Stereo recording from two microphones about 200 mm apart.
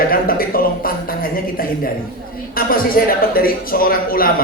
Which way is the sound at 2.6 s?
45° left (ahead or behind).